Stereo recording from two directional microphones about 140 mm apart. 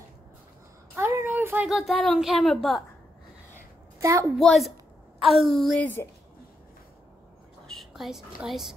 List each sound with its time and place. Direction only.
0.9 s speech: 15° right (ahead or behind); by 2.8 s centre (ahead or behind)
3.5 s a sound: 20° right (ahead or behind)
4.4 s a woman's voice: centre (ahead or behind)
7.6 s a woman's voice: centre (ahead or behind)